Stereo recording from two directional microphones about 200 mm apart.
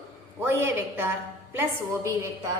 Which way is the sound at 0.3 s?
10° right (ahead or behind).